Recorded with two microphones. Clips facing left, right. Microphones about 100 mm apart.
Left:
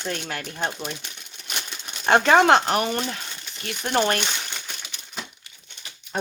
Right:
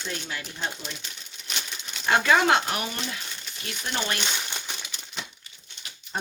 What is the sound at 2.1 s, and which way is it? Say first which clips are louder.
Speech: left 5 dB; 55° left (ahead or behind).